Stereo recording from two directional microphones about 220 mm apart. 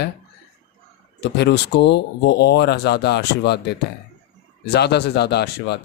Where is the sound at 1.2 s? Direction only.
50° left (ahead or behind).